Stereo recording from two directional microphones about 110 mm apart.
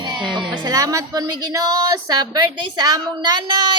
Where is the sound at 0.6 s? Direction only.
30° right (ahead or behind).